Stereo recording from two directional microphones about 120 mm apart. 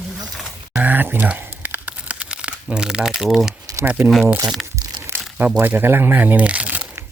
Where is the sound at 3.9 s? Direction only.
15° right (ahead or behind).